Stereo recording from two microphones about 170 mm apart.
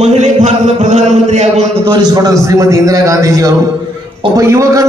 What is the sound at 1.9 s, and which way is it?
A man's voice, 25° right (ahead or behind).